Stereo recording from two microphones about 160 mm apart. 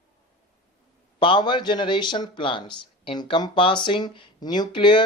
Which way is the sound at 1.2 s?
30° left (ahead or behind).